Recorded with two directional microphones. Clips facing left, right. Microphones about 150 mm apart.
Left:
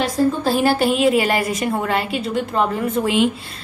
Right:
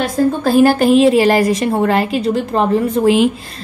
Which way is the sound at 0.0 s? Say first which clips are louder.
Right 3 dB; 50° right (ahead or behind).